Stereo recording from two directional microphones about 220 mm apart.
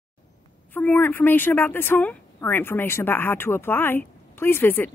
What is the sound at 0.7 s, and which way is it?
Speech, 10° left (ahead or behind).